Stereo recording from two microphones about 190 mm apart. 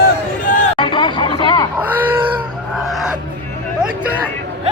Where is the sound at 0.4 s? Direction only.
45° left (ahead or behind).